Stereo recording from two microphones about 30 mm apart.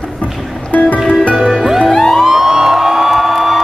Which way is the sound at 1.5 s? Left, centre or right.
Centre.